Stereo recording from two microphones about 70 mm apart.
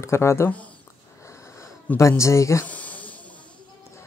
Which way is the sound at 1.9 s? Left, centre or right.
Left.